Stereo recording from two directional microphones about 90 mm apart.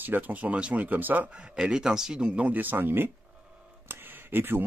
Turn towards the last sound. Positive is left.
turn(degrees=-25)  # may be behind; listen again after turning